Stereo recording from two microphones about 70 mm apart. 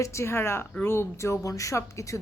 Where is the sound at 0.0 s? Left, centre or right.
Left.